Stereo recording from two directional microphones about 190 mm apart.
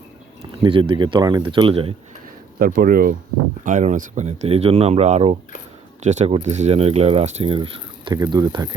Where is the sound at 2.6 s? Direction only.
50° right (ahead or behind).